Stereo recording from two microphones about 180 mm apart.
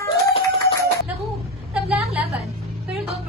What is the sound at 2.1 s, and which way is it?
Music, 35° right (ahead or behind).